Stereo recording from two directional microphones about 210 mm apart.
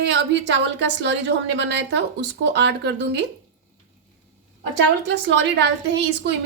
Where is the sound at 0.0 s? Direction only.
55° right (ahead or behind).